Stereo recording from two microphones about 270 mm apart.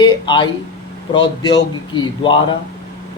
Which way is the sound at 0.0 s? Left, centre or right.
Centre.